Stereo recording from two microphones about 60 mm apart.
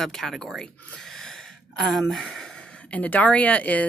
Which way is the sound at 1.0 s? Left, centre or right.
Centre.